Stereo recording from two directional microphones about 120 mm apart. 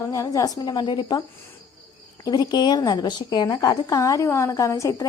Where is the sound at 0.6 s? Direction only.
35° left (ahead or behind).